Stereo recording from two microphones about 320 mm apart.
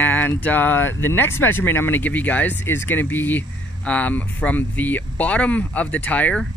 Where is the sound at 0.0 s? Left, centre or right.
Centre.